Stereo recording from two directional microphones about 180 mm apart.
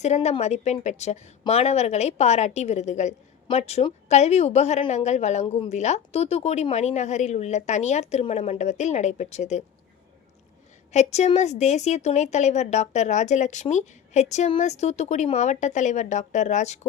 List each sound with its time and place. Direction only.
0.0 s a woman's voice: 40° left (ahead or behind)
10.9 s a woman's voice: 40° left (ahead or behind)